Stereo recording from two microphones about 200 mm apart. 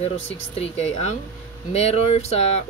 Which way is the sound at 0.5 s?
30° left (ahead or behind).